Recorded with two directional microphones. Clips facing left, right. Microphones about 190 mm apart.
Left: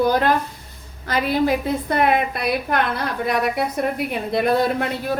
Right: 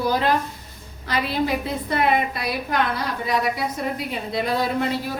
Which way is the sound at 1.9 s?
60° left (ahead or behind).